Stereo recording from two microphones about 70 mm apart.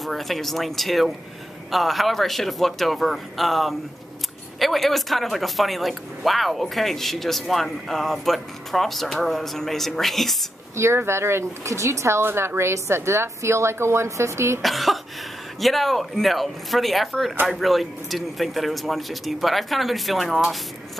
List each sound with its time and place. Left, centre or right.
0.0 s a man's voice: centre
10.8 s speech: right
14.6 s a man's voice: centre